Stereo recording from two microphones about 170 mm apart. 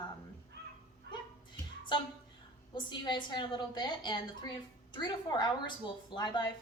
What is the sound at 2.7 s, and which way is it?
A woman's voice, 25° left (ahead or behind).